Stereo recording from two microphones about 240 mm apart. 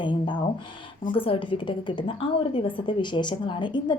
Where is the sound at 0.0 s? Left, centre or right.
Centre.